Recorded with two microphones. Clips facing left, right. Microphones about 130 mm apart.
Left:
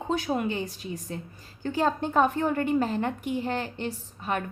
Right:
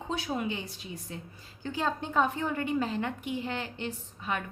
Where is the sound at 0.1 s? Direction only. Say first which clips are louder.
Left 5 dB; 45° left (ahead or behind).